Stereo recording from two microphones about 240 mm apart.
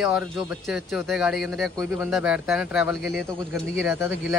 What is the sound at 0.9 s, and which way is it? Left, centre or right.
Speech, centre.